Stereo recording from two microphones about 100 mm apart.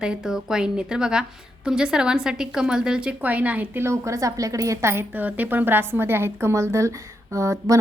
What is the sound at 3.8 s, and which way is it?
Speech, 30° right (ahead or behind).